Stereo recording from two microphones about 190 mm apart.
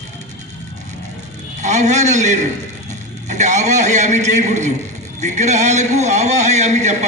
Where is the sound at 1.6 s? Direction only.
35° right (ahead or behind).